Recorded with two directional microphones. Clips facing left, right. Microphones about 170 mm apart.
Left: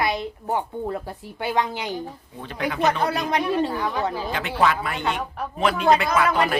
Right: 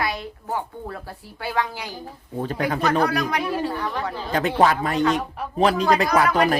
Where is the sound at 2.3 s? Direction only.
40° right (ahead or behind).